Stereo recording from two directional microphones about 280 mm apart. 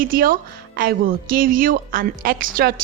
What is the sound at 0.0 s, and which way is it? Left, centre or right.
A woman's voice, right.